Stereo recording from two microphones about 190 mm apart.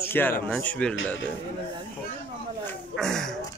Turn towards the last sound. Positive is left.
turn(degrees=0)  # may be behind; listen again after turning